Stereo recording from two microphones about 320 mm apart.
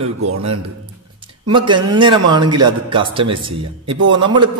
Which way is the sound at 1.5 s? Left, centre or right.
Centre.